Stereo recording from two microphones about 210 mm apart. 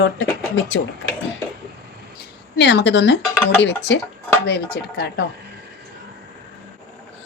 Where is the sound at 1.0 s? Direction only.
60° left (ahead or behind).